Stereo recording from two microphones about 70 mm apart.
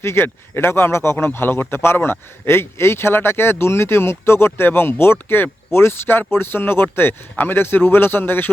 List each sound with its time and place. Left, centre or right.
0.0 s a man's voice: left